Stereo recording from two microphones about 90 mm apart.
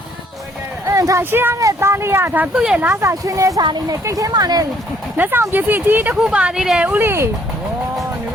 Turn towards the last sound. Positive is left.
turn(degrees=-25)  # may be behind; listen again after turning